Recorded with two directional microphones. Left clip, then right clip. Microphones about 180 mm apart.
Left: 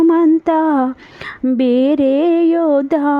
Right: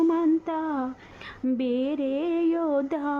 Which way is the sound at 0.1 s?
45° left (ahead or behind).